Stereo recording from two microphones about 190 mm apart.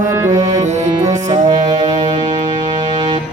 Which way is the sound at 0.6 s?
40° right (ahead or behind).